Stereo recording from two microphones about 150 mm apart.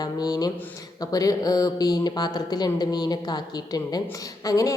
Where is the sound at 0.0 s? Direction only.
25° left (ahead or behind).